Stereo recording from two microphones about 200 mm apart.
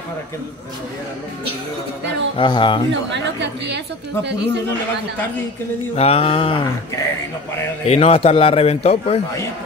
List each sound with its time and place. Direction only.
2.3 s a man's voice: 25° left (ahead or behind)
2.9 s a woman's voice: 60° right (ahead or behind)
5.9 s a man's voice: 30° left (ahead or behind)
7.8 s a man's voice: 30° left (ahead or behind)